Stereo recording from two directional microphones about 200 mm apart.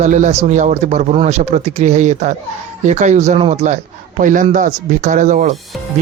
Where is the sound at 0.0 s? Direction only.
35° right (ahead or behind).